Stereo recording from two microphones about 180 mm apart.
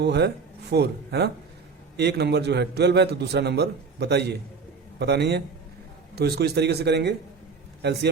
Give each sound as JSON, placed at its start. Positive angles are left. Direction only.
{"t": 0.0, "sound": "a man's voice", "side_deg": -65}